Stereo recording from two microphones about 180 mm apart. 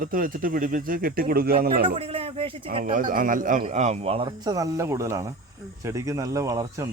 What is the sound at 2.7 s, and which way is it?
A man's voice, 50° right (ahead or behind).